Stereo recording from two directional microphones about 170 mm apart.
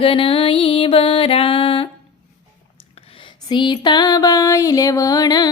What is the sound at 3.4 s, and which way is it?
Music, 25° left (ahead or behind).